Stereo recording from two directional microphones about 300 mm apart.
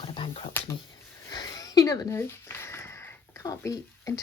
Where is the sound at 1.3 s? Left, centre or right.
Centre.